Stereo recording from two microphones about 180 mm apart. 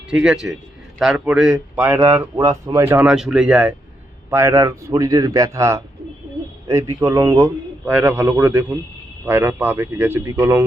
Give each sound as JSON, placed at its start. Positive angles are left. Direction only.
{"t": 0.1, "sound": "a man's voice", "side_deg": -5}
{"t": 2.1, "sound": "speech", "side_deg": -20}
{"t": 7.4, "sound": "speech", "side_deg": -10}